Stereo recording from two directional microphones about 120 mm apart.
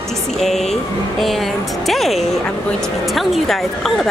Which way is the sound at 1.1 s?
Centre (ahead or behind).